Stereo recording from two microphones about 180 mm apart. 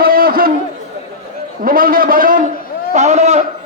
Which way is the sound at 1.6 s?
50° right (ahead or behind).